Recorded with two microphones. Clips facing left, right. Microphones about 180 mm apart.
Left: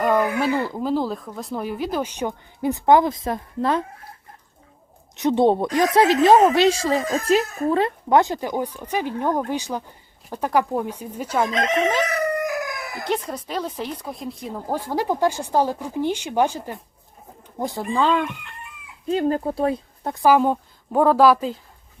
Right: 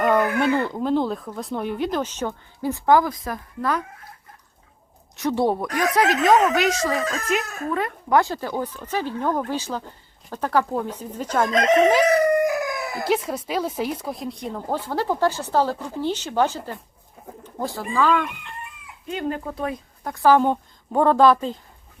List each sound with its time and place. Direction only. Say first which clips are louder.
0.0 s chicken: even; 5° left (ahead or behind)
0.3 s speech: right 1 dB; 5° left (ahead or behind); by 3.8 s 25° left (ahead or behind)
5.1 s speech: left 4 dB; 20° left (ahead or behind)
11.5 s speech: right 5 dB; 40° right (ahead or behind)
12.4 s chicken: right 4 dB; 25° right (ahead or behind)
13.1 s a woman's voice: right 2 dB; 5° right (ahead or behind); by 20.2 s 30° left (ahead or behind)
20.2 s speech: even; 5° left (ahead or behind)